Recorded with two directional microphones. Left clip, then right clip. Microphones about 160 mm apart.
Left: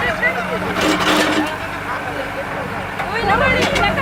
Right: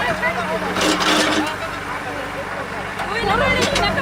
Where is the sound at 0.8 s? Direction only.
25° left (ahead or behind).